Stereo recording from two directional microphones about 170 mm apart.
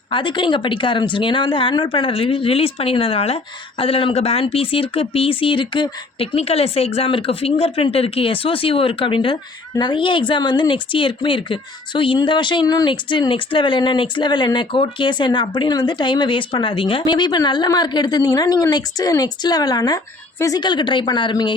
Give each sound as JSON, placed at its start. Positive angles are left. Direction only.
{"t": 0.1, "sound": "speech", "side_deg": 30}